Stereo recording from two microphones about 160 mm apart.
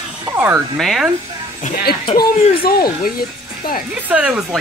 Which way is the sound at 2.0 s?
35° left (ahead or behind).